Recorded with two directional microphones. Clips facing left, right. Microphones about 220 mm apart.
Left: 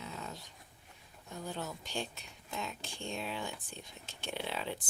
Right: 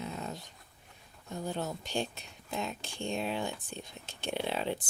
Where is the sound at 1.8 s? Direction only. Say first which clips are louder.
Right 5 dB; 20° right (ahead or behind).